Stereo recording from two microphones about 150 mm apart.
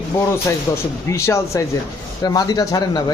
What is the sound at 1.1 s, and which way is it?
Speech, 20° left (ahead or behind).